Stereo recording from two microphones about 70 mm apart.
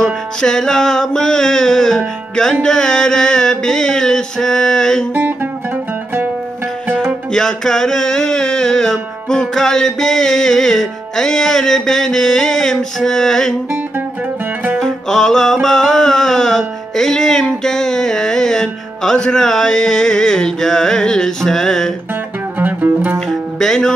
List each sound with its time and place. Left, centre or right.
0.0 s music: centre
2.6 s mantra: centre
5.1 s music: right
6.9 s music: centre
7.3 s music: centre
14.8 s music: centre
22.6 s music: right
23.1 s music: centre